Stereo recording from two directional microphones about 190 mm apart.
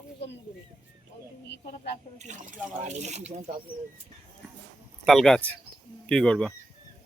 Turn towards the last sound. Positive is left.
turn(degrees=5)  # may be behind; listen again after turning